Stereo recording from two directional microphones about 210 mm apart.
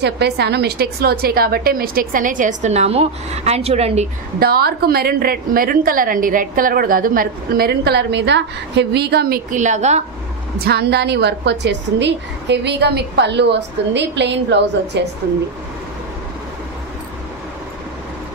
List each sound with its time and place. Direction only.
0.0 s a woman's voice: 55° right (ahead or behind); by 4.1 s 30° right (ahead or behind)
4.4 s a woman's voice: 45° right (ahead or behind)
10.6 s a woman's voice: 50° right (ahead or behind)